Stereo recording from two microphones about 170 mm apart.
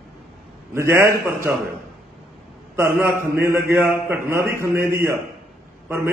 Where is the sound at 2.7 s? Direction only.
15° right (ahead or behind).